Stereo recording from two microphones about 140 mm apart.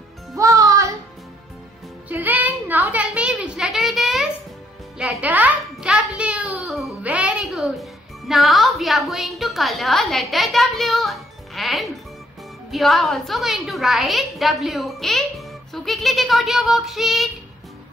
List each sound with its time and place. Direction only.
0.4 s music: 25° right (ahead or behind)
2.0 s a sound: 10° right (ahead or behind)
4.9 s music: 5° right (ahead or behind)
12.7 s a woman's voice: centre (ahead or behind)